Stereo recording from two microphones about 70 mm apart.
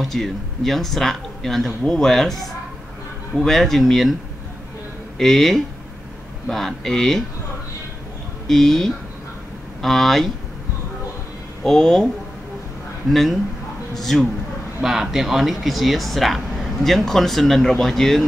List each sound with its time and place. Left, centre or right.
0.0 s speech: centre
5.1 s speech: centre
8.5 s speech: centre
11.6 s speech: centre
13.1 s speech: centre